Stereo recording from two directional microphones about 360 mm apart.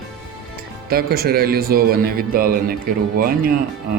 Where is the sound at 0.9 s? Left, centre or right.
Right.